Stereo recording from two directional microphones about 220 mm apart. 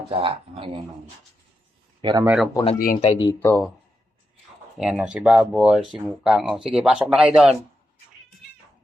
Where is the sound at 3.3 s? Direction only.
5° left (ahead or behind).